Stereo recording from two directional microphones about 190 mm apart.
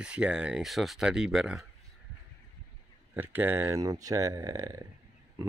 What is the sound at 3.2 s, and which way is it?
Speech, 10° right (ahead or behind).